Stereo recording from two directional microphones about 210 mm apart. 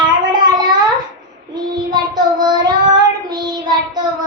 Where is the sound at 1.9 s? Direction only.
20° right (ahead or behind).